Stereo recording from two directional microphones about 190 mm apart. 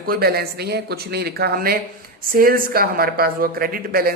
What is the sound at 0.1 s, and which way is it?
A woman's voice, 55° right (ahead or behind).